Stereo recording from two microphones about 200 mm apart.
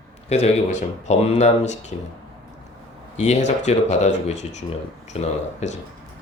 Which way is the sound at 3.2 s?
35° left (ahead or behind).